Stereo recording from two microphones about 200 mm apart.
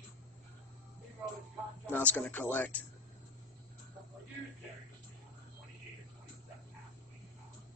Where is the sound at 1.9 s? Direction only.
10° left (ahead or behind).